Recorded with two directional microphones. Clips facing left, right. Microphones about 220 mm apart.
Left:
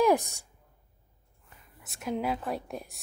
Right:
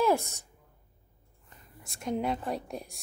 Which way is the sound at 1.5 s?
5° left (ahead or behind).